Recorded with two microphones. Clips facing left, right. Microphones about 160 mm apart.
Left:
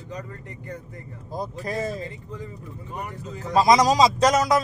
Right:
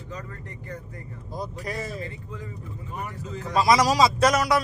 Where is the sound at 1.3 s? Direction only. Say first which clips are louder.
Left 4 dB; 45° left (ahead or behind).